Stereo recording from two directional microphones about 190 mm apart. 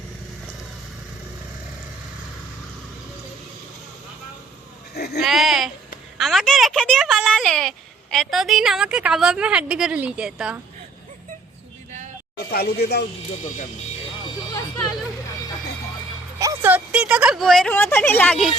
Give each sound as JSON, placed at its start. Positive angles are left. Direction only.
{"t": 4.9, "sound": "sheep", "side_deg": 55}
{"t": 5.2, "sound": "speech", "side_deg": 0}
{"t": 12.5, "sound": "speech", "side_deg": 55}
{"t": 16.4, "sound": "speech", "side_deg": -15}